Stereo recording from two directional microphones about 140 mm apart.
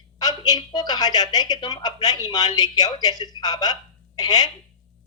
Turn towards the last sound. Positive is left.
turn(degrees=30)  # may be behind; listen again after turning